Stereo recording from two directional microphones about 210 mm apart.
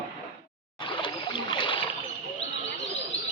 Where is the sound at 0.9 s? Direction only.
20° left (ahead or behind).